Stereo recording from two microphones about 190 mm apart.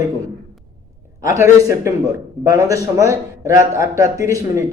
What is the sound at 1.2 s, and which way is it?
Speech, 15° right (ahead or behind).